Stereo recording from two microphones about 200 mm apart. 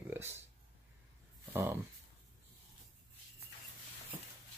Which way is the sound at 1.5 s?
10° right (ahead or behind).